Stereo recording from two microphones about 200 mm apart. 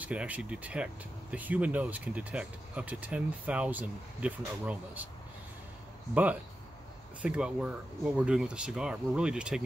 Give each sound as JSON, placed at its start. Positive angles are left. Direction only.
{"t": 0.0, "sound": "speech", "side_deg": -5}
{"t": 7.2, "sound": "speech", "side_deg": -5}